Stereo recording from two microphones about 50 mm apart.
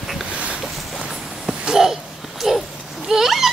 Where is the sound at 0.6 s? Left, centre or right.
Centre.